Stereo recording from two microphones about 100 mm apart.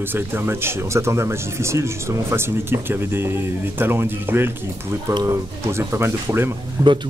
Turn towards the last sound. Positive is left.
turn(degrees=-30)  # may be behind; listen again after turning